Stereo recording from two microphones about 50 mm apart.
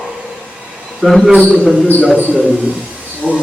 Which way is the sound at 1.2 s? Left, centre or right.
Centre.